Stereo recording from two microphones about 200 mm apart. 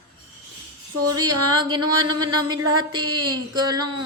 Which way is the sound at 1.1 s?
20° right (ahead or behind).